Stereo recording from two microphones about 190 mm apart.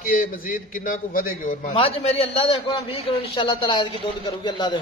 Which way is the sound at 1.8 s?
30° left (ahead or behind).